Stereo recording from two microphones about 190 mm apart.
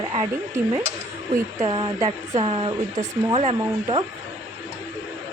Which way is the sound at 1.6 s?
25° right (ahead or behind).